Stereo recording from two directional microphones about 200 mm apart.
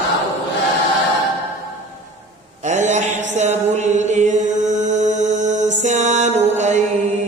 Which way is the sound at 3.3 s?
35° right (ahead or behind).